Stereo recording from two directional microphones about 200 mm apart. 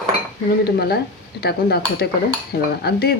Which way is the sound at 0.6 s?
50° left (ahead or behind).